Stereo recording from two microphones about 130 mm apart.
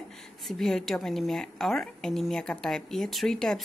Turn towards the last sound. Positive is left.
turn(degrees=5)  # may be behind; listen again after turning